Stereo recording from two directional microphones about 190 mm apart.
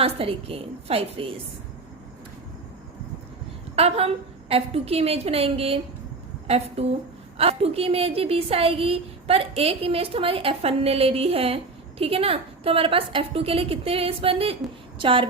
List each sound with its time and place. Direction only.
0.0 s a woman's voice: 30° right (ahead or behind)
3.8 s a woman's voice: 35° right (ahead or behind)